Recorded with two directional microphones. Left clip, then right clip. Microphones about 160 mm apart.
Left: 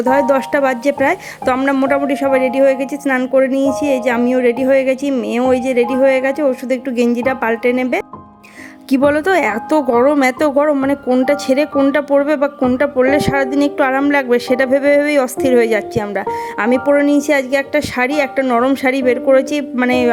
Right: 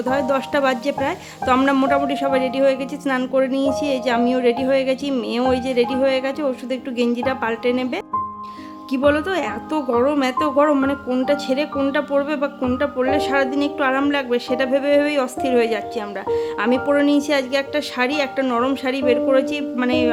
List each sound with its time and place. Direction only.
0.0 s speech: 30° left (ahead or behind)
8.9 s a woman's voice: 50° left (ahead or behind)